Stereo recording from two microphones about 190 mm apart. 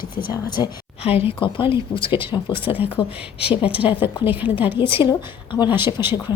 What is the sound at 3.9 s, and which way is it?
Speech, 25° left (ahead or behind).